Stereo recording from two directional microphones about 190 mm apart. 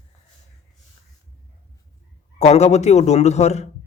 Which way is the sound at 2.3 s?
35° left (ahead or behind).